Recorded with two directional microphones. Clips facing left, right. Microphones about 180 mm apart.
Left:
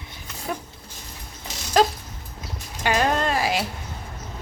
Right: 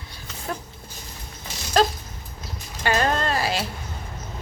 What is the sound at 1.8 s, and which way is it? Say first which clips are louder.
Dog: left 1 dB; 15° left (ahead or behind).